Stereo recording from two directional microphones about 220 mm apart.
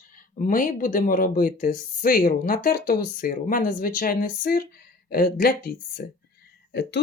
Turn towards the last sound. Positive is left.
turn(degrees=50)  # may be behind; listen again after turning